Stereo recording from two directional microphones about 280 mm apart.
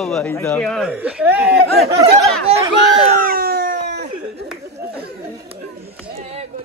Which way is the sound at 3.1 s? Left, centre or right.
Right.